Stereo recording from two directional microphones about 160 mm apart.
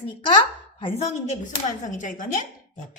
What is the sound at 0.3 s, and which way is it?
A woman's voice, 35° left (ahead or behind).